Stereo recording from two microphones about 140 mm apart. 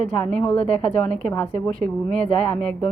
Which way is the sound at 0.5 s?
45° left (ahead or behind).